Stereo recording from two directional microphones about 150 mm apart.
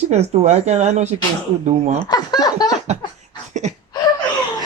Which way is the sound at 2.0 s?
25° left (ahead or behind).